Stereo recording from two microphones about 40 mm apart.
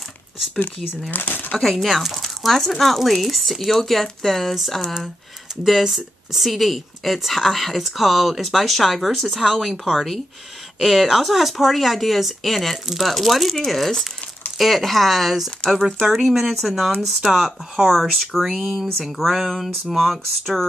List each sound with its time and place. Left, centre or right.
1.1 s speech: left
1.6 s speech: centre